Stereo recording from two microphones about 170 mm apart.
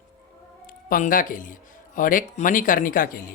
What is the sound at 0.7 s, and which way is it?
Speech, 55° left (ahead or behind).